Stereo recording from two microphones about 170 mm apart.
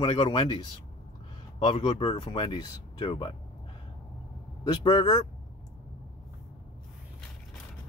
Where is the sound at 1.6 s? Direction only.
30° left (ahead or behind).